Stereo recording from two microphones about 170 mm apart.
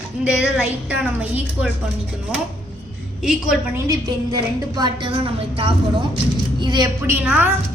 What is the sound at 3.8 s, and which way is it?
A woman's voice, 20° right (ahead or behind).